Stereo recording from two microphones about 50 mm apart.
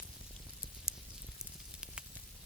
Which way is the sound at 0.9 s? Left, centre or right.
Centre.